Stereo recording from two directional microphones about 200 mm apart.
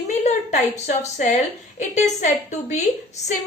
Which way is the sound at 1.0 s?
35° left (ahead or behind).